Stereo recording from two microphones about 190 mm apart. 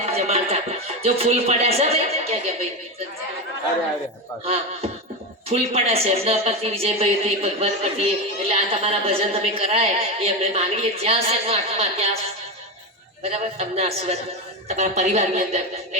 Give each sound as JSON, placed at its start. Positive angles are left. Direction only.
{"t": 0.0, "sound": "music", "side_deg": -35}
{"t": 1.0, "sound": "speech", "side_deg": -30}
{"t": 5.5, "sound": "speech", "side_deg": -30}
{"t": 13.3, "sound": "speech", "side_deg": -35}